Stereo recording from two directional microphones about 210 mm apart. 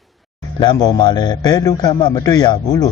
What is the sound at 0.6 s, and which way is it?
A man's voice, 20° left (ahead or behind).